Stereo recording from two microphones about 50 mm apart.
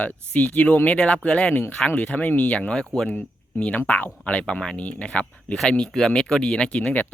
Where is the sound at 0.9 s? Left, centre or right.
Left.